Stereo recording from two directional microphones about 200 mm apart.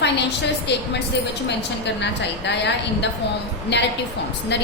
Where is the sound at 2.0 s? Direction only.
60° left (ahead or behind).